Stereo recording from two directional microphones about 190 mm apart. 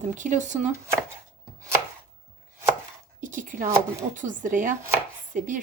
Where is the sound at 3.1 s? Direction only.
45° right (ahead or behind).